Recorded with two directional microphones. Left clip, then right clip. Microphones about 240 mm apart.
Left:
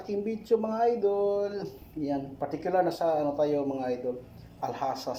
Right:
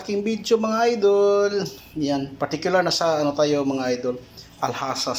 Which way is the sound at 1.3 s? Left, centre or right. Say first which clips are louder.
Right 10 dB; centre.